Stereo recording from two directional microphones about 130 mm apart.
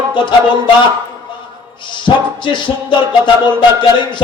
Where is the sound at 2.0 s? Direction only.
40° left (ahead or behind).